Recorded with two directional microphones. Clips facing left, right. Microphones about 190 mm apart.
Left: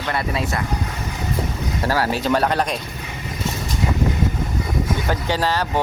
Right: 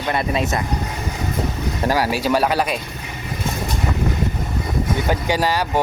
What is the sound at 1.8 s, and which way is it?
Speech, 15° right (ahead or behind).